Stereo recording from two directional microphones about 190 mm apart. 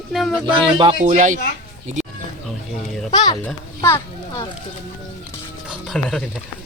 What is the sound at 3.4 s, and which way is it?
Children playing, 15° left (ahead or behind).